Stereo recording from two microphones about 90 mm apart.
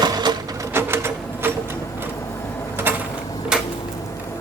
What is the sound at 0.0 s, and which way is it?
Sewing machine, 50° right (ahead or behind).